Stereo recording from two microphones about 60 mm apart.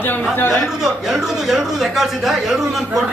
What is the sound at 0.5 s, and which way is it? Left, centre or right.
Speech, centre.